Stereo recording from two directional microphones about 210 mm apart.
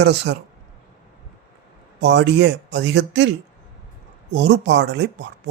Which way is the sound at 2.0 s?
55° right (ahead or behind).